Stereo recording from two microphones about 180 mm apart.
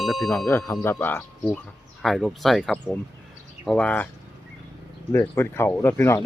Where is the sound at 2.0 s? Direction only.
Centre (ahead or behind).